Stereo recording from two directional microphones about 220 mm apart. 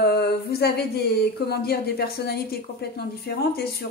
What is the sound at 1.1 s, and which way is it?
A woman's voice, 45° left (ahead or behind).